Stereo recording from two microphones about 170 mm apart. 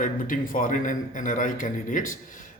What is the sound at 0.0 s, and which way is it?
A man's voice, 50° left (ahead or behind).